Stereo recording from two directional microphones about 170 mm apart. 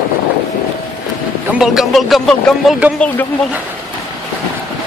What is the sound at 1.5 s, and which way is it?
Speech, 5° right (ahead or behind).